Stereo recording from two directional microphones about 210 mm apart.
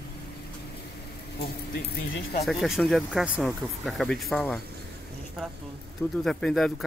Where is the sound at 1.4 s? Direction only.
50° left (ahead or behind).